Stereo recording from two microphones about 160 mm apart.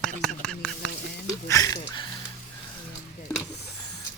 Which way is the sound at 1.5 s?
20° left (ahead or behind).